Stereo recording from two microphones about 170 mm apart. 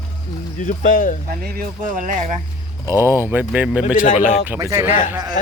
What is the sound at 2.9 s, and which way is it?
Speech, 15° right (ahead or behind).